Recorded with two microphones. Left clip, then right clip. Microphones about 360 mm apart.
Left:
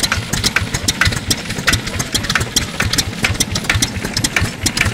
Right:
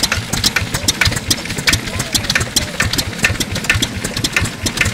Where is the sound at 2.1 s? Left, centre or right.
Centre.